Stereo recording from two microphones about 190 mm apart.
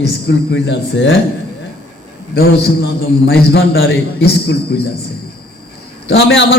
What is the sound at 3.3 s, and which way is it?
A man's voice, 60° left (ahead or behind).